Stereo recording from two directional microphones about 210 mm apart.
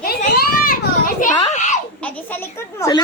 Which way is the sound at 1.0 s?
35° left (ahead or behind).